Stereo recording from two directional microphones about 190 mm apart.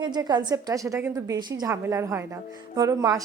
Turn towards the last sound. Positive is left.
turn(degrees=-15)  # may be behind; listen again after turning